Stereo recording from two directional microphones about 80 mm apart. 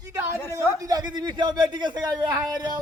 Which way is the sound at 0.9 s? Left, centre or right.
Right.